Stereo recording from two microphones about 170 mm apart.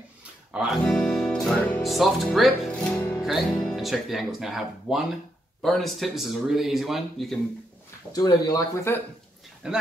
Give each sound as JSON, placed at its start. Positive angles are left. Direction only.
{"t": 0.5, "sound": "speech", "side_deg": -5}
{"t": 8.1, "sound": "speech", "side_deg": 25}
{"t": 9.6, "sound": "speech", "side_deg": -5}